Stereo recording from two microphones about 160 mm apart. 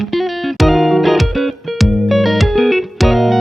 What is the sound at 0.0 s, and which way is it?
Music, centre (ahead or behind).